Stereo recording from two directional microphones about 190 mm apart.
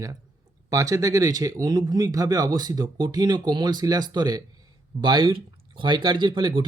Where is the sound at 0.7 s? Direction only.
15° right (ahead or behind).